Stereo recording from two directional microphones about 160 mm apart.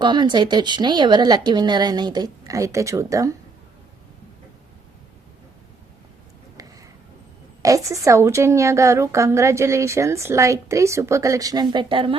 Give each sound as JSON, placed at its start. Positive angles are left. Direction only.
{"t": 0.0, "sound": "a woman's voice", "side_deg": -30}
{"t": 7.6, "sound": "a woman's voice", "side_deg": -20}